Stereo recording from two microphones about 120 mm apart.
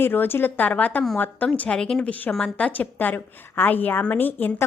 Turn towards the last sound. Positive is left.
turn(degrees=15)  # may be behind; listen again after turning